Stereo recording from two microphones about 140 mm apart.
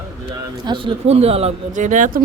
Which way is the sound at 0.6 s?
35° right (ahead or behind).